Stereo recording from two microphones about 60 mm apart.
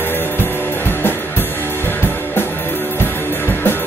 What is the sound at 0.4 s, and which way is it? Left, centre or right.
Music, left.